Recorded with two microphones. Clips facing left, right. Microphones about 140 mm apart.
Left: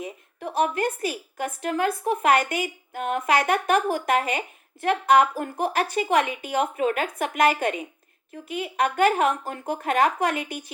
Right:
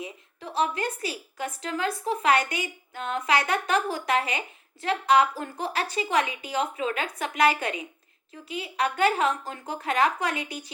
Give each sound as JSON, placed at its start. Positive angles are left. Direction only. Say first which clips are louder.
{"t": 0.0, "sound": "a woman's voice", "louder": "left 5 dB", "side_deg": 55}